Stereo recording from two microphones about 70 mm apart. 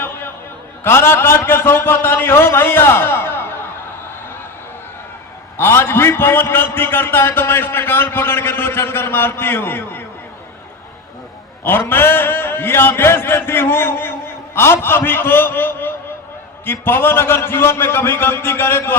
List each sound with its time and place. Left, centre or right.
0.0 s a sound: left
0.9 s a man's voice: left
5.5 s a man's voice: left
11.6 s a man's voice: left